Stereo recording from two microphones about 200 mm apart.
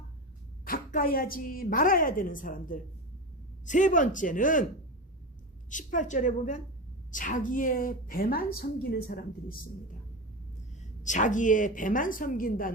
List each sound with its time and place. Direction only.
0.6 s a woman's voice: 45° left (ahead or behind)
5.7 s a woman's voice: 40° left (ahead or behind)
10.8 s a woman's voice: 40° left (ahead or behind)